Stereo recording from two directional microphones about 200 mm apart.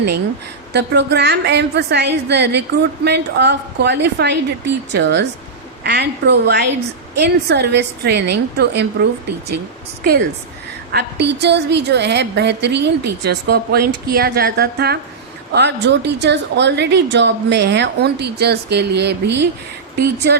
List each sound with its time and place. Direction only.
0.7 s a woman's voice: 55° right (ahead or behind)
10.0 s a woman's voice: 50° right (ahead or behind)